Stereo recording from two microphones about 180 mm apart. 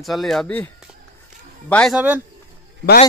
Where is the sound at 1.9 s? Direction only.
10° right (ahead or behind).